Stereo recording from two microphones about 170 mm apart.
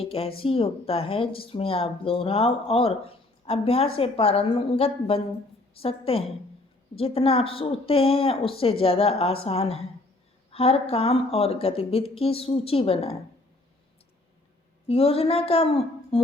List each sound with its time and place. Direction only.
0.0 s speech: 35° left (ahead or behind)
14.8 s speech: 35° left (ahead or behind)